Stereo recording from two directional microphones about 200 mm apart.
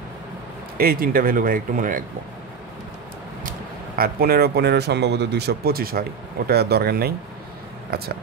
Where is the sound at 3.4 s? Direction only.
50° right (ahead or behind).